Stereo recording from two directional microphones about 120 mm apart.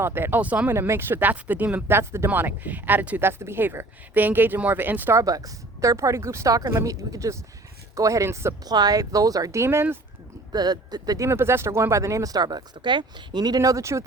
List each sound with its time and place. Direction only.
0.0 s speech: 20° right (ahead or behind)
5.2 s speech: 30° right (ahead or behind)
8.7 s speech: 35° right (ahead or behind)
10.5 s speech: 35° right (ahead or behind)